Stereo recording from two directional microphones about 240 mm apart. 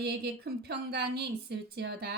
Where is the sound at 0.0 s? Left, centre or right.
Right.